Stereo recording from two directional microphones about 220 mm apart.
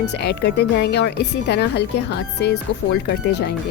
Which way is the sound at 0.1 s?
50° left (ahead or behind).